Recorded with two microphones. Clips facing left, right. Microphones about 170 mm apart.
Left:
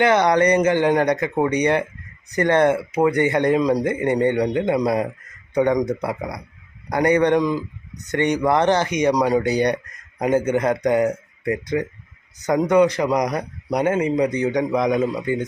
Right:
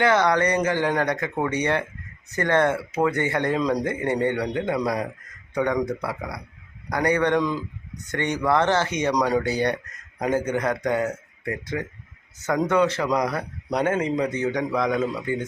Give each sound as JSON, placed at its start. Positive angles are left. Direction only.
{"t": 0.0, "sound": "speech", "side_deg": 20}